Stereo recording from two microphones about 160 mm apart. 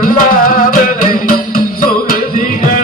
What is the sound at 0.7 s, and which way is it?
Music, 60° left (ahead or behind).